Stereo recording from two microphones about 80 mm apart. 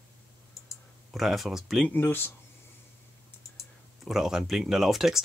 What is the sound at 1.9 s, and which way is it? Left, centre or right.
Speech, left.